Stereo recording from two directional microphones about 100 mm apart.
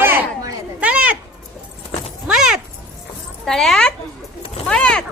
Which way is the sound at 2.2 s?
5° right (ahead or behind).